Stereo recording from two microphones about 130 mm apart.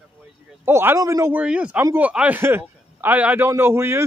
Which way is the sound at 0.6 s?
20° right (ahead or behind).